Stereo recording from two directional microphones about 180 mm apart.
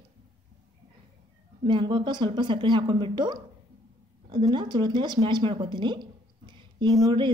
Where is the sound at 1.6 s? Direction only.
25° right (ahead or behind).